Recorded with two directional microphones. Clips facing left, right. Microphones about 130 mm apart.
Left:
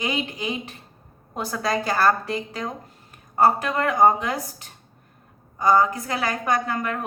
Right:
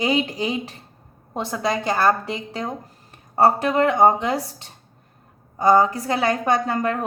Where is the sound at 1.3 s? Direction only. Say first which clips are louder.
Right 1 dB; 25° right (ahead or behind).